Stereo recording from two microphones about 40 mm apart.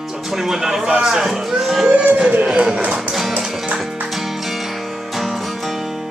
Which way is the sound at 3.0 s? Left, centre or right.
Centre.